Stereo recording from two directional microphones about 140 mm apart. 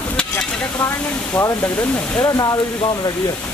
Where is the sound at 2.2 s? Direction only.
25° left (ahead or behind).